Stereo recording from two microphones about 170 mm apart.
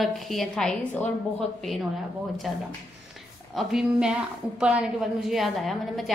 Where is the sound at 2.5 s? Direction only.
Centre (ahead or behind).